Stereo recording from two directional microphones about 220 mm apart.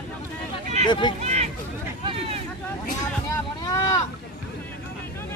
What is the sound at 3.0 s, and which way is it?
Vehicle, 15° left (ahead or behind).